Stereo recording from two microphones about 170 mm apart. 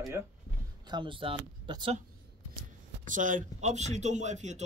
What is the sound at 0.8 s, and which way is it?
Speech, 25° right (ahead or behind).